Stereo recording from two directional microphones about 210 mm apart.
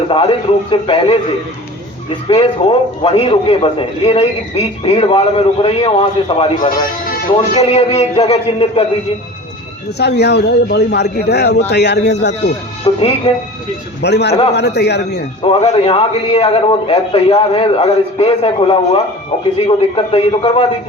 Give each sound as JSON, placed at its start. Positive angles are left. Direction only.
{"t": 0.1, "sound": "a man's voice", "side_deg": 25}
{"t": 2.2, "sound": "a man's voice", "side_deg": 25}
{"t": 10.0, "sound": "speech", "side_deg": 50}
{"t": 12.8, "sound": "a man's voice", "side_deg": 25}
{"t": 14.0, "sound": "speech", "side_deg": 55}
{"t": 15.4, "sound": "a man's voice", "side_deg": 25}